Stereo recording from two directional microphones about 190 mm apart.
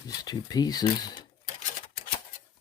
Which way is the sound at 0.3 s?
20° left (ahead or behind).